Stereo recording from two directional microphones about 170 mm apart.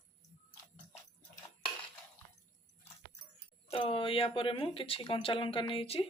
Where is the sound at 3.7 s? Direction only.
35° left (ahead or behind).